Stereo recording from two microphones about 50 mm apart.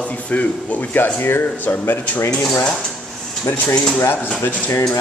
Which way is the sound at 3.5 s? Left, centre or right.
Left.